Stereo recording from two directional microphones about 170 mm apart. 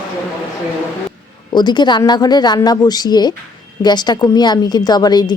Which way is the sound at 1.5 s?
25° left (ahead or behind).